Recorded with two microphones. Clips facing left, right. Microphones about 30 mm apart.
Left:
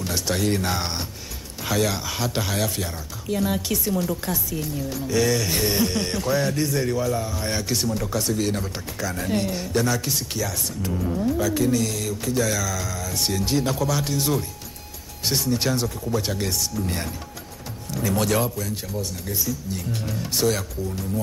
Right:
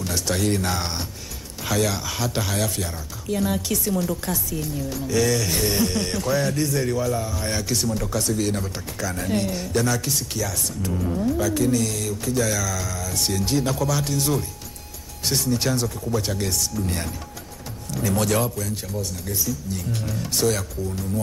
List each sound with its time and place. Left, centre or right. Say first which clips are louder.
0.0 s a sound: even; centre
0.5 s speech: even; centre
10.9 s speech: even; centre
11.5 s speech: even; centre